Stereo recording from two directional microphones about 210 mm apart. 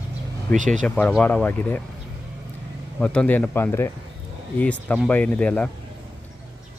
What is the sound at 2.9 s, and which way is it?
Speech, 5° left (ahead or behind).